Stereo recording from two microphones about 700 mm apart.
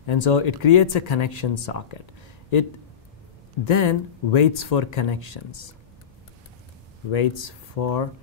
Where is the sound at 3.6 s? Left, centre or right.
Left.